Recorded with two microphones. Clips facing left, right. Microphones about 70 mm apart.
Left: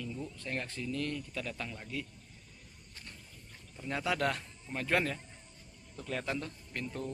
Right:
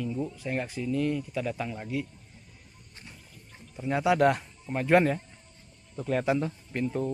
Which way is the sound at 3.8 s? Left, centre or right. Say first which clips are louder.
Right 9 dB; centre.